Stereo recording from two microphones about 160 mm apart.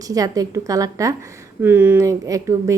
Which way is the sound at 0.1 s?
20° right (ahead or behind).